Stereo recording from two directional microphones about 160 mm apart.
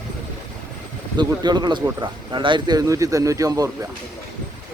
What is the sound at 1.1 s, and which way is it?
Speech, 25° right (ahead or behind).